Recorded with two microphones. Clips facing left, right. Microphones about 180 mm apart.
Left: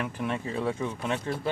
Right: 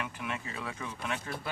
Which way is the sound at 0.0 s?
35° left (ahead or behind).